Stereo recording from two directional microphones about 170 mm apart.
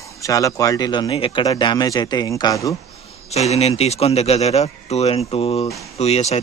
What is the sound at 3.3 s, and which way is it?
A man's voice, 40° left (ahead or behind).